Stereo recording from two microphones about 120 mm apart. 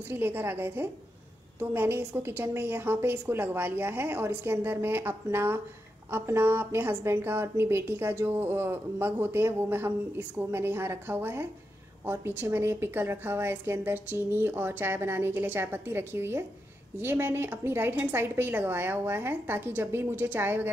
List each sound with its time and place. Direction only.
0.1 s a woman's voice: 15° right (ahead or behind)